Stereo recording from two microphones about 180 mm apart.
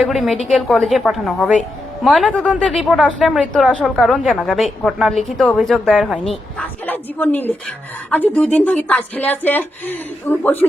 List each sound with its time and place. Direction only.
0.0 s a woman's voice: centre (ahead or behind)